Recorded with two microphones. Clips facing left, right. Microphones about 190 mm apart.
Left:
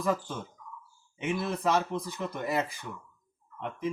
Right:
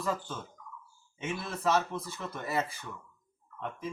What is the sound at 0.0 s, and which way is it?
Speech, 15° left (ahead or behind).